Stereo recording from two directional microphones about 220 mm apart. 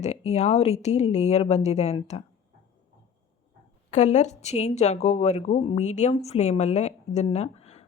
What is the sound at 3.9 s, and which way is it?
A woman's voice, 30° left (ahead or behind).